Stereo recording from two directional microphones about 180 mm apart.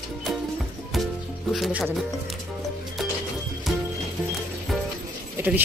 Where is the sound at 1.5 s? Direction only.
5° right (ahead or behind).